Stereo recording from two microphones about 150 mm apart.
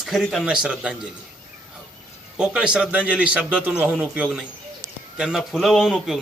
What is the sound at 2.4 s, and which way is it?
A man's voice, 5° right (ahead or behind).